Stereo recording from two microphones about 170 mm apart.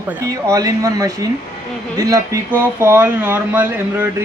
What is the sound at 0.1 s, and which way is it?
Speech, 20° right (ahead or behind).